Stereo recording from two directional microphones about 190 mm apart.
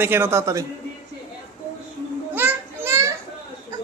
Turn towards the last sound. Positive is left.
turn(degrees=-15)  # may be behind; listen again after turning